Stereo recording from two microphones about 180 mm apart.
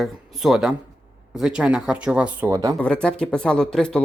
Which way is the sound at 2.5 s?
20° right (ahead or behind).